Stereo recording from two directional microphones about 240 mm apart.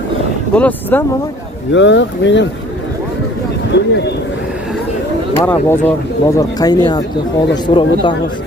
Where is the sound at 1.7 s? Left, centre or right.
Left.